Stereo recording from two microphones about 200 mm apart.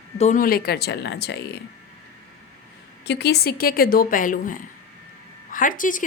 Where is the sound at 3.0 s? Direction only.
55° left (ahead or behind).